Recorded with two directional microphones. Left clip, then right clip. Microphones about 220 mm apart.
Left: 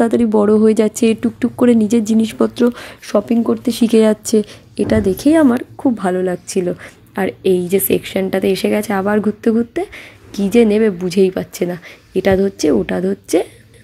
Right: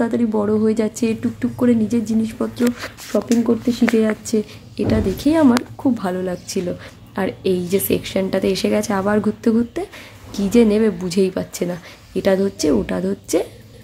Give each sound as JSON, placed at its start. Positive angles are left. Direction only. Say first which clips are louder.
{"t": 0.0, "sound": "a woman's voice", "louder": "left 6 dB", "side_deg": 35}